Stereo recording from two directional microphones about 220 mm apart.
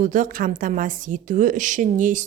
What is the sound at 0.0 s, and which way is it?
A woman's voice, 35° right (ahead or behind).